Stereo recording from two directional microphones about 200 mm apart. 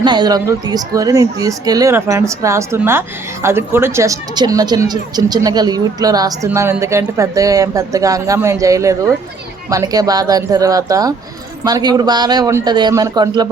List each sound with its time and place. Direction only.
0.0 s a man's voice: 20° right (ahead or behind)